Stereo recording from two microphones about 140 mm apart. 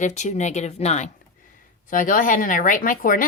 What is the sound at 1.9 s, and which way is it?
Speech, 70° left (ahead or behind).